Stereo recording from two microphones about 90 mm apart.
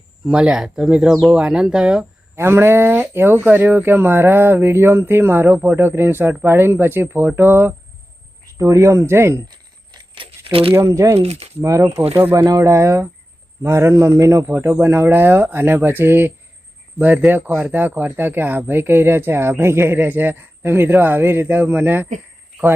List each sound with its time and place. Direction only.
0.3 s speech: 10° right (ahead or behind)
2.3 s speech: 30° right (ahead or behind)
8.5 s speech: 40° right (ahead or behind)
10.2 s a sound: 90° right
10.8 s speech: 35° right (ahead or behind)